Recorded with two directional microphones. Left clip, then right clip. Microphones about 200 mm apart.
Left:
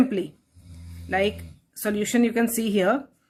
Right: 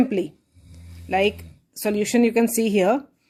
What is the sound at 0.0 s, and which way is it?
Speech, 20° right (ahead or behind).